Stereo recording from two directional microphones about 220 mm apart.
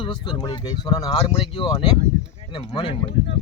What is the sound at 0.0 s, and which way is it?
Speech, 20° left (ahead or behind).